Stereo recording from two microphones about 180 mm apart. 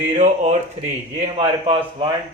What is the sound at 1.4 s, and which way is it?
Speech, 30° right (ahead or behind).